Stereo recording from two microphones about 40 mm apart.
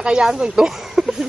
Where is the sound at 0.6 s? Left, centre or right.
Centre.